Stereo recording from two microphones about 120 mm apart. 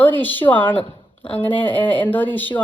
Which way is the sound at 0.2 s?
15° left (ahead or behind).